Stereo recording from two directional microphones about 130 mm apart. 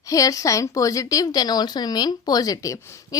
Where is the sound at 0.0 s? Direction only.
25° left (ahead or behind).